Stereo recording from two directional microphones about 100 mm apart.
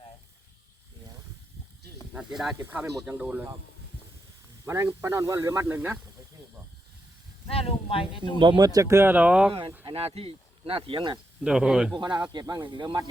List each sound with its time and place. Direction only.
2.1 s speech: 5° right (ahead or behind)
2.6 s speech: 20° right (ahead or behind)
4.6 s speech: 25° right (ahead or behind)
7.4 s speech: 75° left (ahead or behind)
8.4 s speech: 55° right (ahead or behind)
8.6 s speech: 35° right (ahead or behind); by 9.5 s 15° right (ahead or behind)
9.5 s speech: 60° right (ahead or behind)
9.8 s speech: 75° right (ahead or behind); by 11.2 s 55° right (ahead or behind)
11.4 s speech: 10° right (ahead or behind)
11.9 s speech: 45° right (ahead or behind)